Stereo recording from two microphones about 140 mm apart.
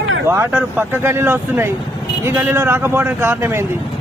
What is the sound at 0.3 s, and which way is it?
Speech, 15° right (ahead or behind).